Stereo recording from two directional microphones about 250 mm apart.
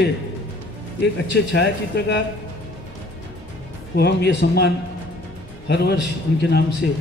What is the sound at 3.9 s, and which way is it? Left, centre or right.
A man's voice, left.